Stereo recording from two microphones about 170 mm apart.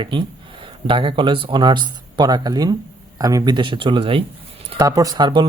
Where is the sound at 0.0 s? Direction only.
30° right (ahead or behind).